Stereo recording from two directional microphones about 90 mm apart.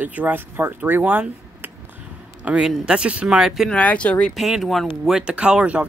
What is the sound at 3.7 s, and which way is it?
Speech, 15° left (ahead or behind).